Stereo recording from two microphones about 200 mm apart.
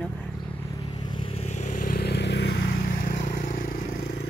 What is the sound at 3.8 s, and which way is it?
Vehicle, 50° left (ahead or behind).